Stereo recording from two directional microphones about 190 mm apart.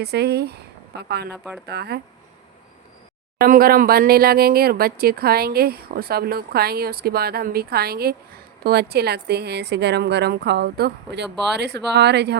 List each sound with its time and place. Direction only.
0.0 s speech: 60° right (ahead or behind)
3.4 s speech: 50° right (ahead or behind)